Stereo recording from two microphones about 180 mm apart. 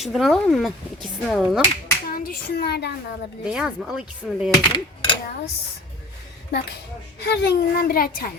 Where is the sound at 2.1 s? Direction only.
55° left (ahead or behind).